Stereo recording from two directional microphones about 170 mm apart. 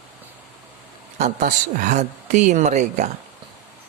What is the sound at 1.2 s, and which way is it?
Mantra, 45° right (ahead or behind).